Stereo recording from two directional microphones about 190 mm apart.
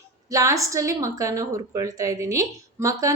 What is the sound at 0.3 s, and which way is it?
A woman's voice, 15° right (ahead or behind).